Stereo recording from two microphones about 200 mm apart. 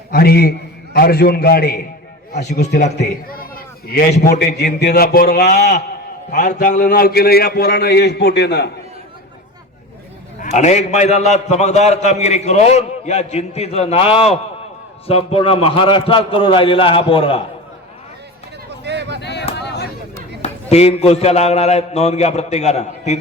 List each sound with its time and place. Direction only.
0.1 s a man's voice: 50° left (ahead or behind)
2.3 s a man's voice: 35° left (ahead or behind)
2.6 s a man's voice: 55° left (ahead or behind)
6.3 s a man's voice: 40° left (ahead or behind)
10.4 s a man's voice: 35° left (ahead or behind)
18.9 s a sound: 60° right (ahead or behind)
19.2 s a sound: 60° left (ahead or behind)
20.4 s a man's voice: 30° left (ahead or behind)